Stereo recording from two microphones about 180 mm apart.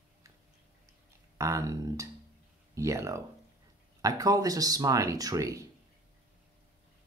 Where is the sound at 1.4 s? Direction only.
15° right (ahead or behind).